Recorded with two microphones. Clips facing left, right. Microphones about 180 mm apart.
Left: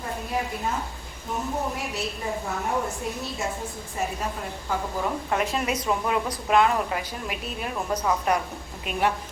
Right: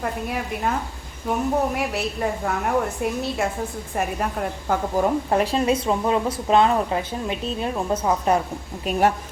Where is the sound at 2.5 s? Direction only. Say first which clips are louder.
Right 5 dB; 60° right (ahead or behind).